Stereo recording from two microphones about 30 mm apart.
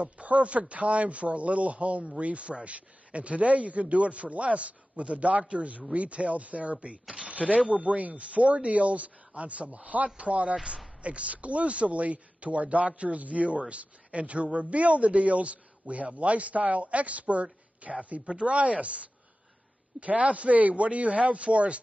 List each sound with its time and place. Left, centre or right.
0.0 s speech: right
7.2 s a sound: right
7.8 s speech: right